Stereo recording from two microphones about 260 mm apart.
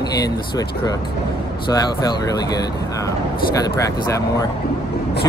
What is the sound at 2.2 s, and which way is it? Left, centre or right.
Speech, centre.